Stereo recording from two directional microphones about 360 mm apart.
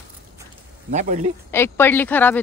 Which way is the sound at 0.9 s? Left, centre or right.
Centre.